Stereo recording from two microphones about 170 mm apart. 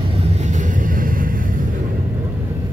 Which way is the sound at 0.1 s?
40° right (ahead or behind).